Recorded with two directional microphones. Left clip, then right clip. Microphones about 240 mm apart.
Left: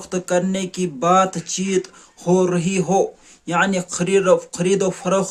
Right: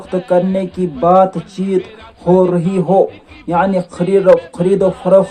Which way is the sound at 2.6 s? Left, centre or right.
Left.